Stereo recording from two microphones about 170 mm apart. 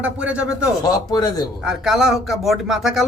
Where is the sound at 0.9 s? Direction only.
25° left (ahead or behind).